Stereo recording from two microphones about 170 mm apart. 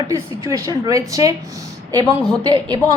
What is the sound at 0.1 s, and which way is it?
A woman's voice, 20° right (ahead or behind).